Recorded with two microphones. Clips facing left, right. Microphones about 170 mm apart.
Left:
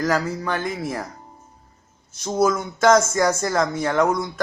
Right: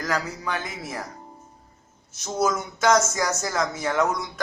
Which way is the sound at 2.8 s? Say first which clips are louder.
Left 5 dB; 55° left (ahead or behind).